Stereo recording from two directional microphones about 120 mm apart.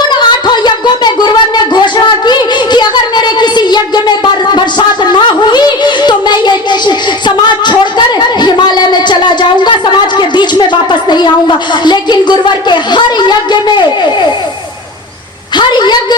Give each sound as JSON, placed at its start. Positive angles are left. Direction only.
{"t": 0.1, "sound": "a sound", "side_deg": 40}
{"t": 5.1, "sound": "music", "side_deg": 40}
{"t": 10.2, "sound": "a woman's voice", "side_deg": 40}
{"t": 15.5, "sound": "a woman's voice", "side_deg": 35}